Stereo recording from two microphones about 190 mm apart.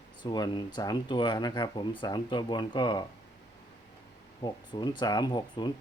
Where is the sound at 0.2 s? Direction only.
20° left (ahead or behind).